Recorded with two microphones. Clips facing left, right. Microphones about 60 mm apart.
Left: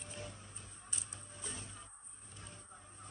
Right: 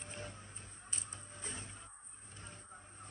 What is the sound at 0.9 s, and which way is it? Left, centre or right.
Music, right.